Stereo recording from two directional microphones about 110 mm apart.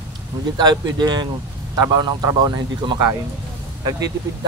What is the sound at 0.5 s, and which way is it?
Speech, 40° right (ahead or behind).